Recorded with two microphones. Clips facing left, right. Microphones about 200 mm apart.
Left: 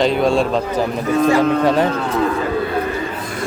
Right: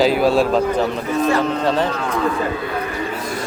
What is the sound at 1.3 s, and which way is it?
Speech, 10° left (ahead or behind).